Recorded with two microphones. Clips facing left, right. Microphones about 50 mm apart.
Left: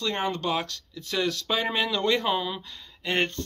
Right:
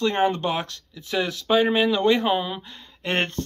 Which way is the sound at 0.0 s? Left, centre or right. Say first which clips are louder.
Right 6 dB; right.